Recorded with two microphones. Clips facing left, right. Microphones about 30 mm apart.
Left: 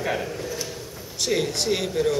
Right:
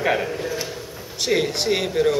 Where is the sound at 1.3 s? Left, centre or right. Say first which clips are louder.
Right 3 dB; centre.